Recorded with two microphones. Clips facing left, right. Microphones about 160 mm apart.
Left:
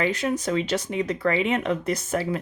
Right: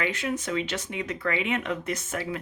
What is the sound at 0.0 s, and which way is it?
Speech, 35° left (ahead or behind).